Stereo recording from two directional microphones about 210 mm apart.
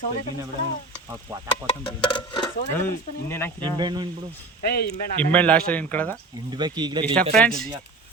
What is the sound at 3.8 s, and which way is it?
Speech, 20° right (ahead or behind).